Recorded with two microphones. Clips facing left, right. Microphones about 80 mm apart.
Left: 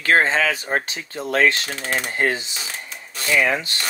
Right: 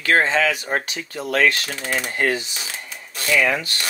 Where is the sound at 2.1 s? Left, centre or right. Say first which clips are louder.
Right 1 dB; left.